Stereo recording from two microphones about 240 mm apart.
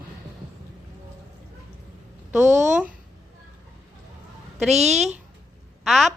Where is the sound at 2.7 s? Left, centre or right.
Centre.